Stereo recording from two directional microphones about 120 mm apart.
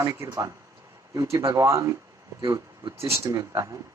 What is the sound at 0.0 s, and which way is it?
Speech, 25° right (ahead or behind).